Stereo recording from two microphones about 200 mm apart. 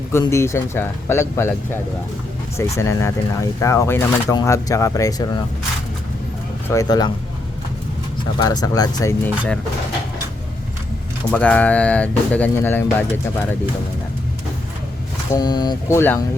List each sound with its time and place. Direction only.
0.1 s speech: 15° left (ahead or behind)
6.7 s speech: 20° left (ahead or behind)
8.4 s speech: 20° left (ahead or behind)
11.3 s speech: 5° left (ahead or behind)
15.3 s speech: 20° left (ahead or behind)